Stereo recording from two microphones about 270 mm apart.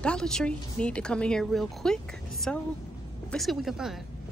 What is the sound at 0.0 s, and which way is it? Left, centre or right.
Speech, centre.